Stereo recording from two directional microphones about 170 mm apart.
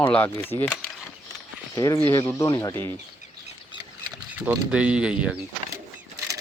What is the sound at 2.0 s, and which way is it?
Speech, 15° left (ahead or behind).